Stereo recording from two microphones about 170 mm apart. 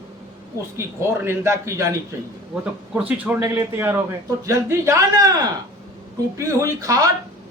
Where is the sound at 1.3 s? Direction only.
15° right (ahead or behind).